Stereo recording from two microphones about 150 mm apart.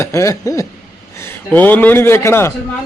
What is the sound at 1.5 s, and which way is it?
A woman's voice, 10° left (ahead or behind).